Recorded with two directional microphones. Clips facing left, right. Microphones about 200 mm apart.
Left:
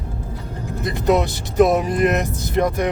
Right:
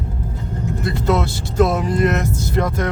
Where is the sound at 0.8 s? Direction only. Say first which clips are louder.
Left 2 dB; 20° left (ahead or behind).